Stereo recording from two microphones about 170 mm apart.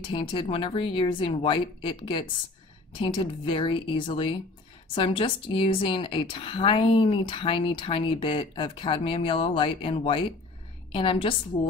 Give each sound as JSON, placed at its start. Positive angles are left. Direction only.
{"t": 0.0, "sound": "a woman's voice", "side_deg": 30}